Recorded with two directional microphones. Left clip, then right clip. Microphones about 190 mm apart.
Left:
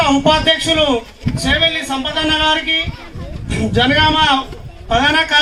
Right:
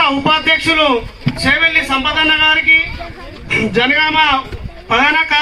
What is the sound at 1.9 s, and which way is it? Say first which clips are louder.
Speech: right 4 dB; 15° left (ahead or behind).